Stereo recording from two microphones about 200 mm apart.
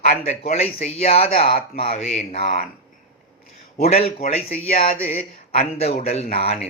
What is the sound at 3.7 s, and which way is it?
A man's voice, 35° left (ahead or behind).